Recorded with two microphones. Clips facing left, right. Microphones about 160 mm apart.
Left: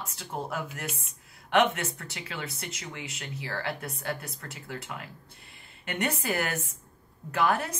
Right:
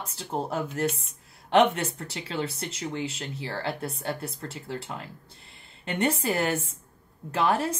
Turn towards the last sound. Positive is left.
turn(degrees=-30)  # may be behind; listen again after turning